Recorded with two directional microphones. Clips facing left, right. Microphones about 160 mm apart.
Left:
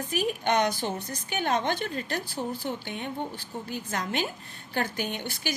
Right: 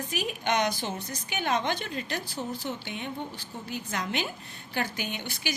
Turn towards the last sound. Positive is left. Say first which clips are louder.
# left 2 dB
turn(degrees=50)  # may be behind; listen again after turning